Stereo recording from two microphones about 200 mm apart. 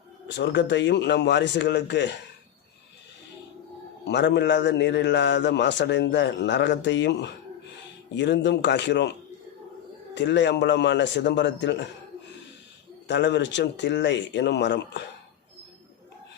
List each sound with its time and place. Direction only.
0.3 s a man's voice: 60° left (ahead or behind)
4.0 s a man's voice: 60° left (ahead or behind)
10.2 s a man's voice: 60° left (ahead or behind)
13.1 s a man's voice: 60° left (ahead or behind)